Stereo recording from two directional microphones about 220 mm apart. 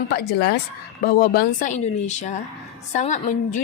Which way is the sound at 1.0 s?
45° left (ahead or behind).